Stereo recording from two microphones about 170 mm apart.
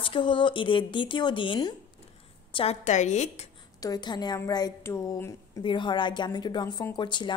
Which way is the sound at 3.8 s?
25° left (ahead or behind).